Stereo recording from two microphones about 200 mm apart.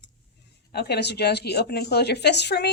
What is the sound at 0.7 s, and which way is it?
Speech, 55° left (ahead or behind).